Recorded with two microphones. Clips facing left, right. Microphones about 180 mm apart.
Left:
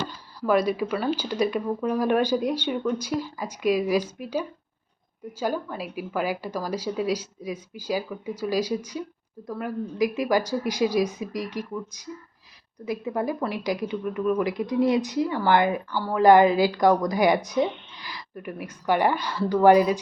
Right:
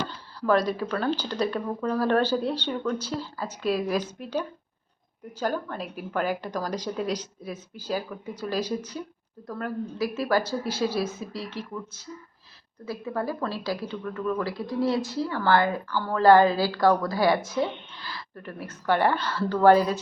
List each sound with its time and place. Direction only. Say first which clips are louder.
0.1 s speech: left 1 dB; 10° left (ahead or behind)